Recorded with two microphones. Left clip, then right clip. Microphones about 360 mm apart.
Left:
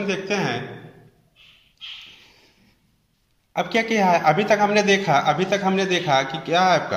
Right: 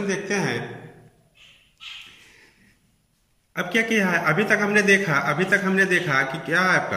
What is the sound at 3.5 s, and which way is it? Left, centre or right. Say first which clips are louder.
Speech: left 1 dB; centre.